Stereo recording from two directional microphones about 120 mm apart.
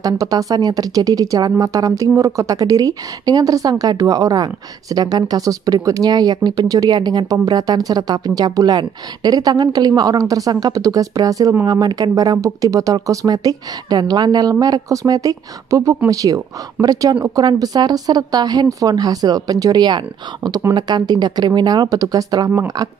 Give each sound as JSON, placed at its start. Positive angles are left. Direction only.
{"t": 0.0, "sound": "speech", "side_deg": -30}